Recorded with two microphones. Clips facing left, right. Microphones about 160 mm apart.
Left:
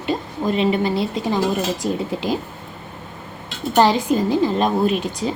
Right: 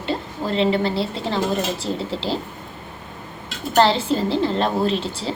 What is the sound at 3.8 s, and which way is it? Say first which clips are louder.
A woman's voice: left 1 dB; 15° left (ahead or behind).